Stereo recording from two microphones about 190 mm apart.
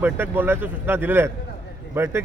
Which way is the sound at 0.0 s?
10° right (ahead or behind).